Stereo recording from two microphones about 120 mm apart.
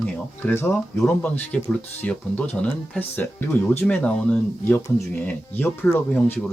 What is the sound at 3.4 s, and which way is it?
Speech, 20° left (ahead or behind).